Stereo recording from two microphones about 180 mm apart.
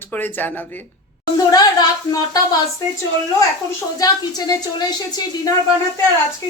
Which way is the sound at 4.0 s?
20° left (ahead or behind).